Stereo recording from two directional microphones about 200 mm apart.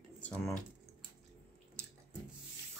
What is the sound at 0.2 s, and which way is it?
Speech, 5° left (ahead or behind).